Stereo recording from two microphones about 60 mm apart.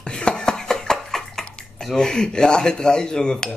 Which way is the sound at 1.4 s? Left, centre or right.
Centre.